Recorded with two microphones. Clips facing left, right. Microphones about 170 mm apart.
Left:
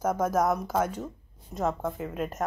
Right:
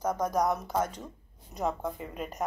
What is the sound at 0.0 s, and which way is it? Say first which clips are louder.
A woman's voice: left 3 dB; 5° left (ahead or behind).